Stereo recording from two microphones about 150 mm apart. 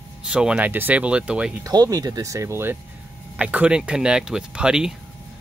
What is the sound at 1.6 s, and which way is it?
Speech, 25° right (ahead or behind).